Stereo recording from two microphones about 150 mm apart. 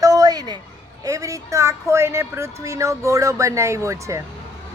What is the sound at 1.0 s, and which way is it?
Speech, 20° right (ahead or behind).